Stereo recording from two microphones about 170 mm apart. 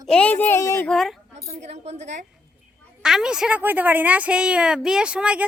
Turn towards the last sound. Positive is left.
turn(degrees=-5)  # may be behind; listen again after turning